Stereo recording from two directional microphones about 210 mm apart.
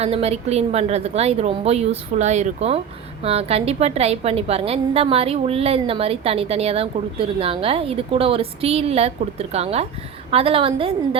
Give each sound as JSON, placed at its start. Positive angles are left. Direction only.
{"t": 0.0, "sound": "a woman's voice", "side_deg": -30}